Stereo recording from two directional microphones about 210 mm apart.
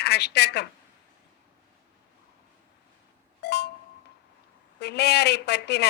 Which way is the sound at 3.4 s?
50° left (ahead or behind).